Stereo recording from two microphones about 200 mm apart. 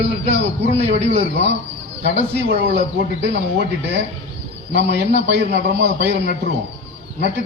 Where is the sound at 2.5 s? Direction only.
55° right (ahead or behind).